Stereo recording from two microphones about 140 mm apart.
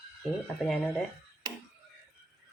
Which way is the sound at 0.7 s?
5° left (ahead or behind).